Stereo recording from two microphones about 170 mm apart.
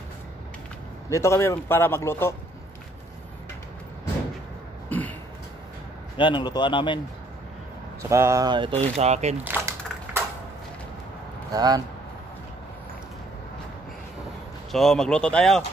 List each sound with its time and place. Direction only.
1.1 s a man's voice: 15° left (ahead or behind)
4.8 s cough: 10° left (ahead or behind)
6.1 s a man's voice: 30° left (ahead or behind)
8.0 s speech: 15° right (ahead or behind); by 9.4 s 40° right (ahead or behind)
9.4 s a sound: 10° right (ahead or behind)
11.5 s speech: 20° right (ahead or behind)
14.7 s speech: centre (ahead or behind)